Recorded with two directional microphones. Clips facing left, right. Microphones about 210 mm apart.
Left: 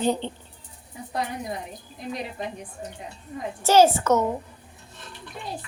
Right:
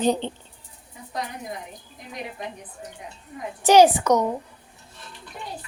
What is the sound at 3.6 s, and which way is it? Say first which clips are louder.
Speech: right 2 dB; 15° right (ahead or behind).